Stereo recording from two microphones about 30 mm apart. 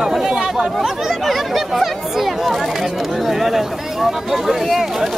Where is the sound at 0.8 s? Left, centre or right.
Centre.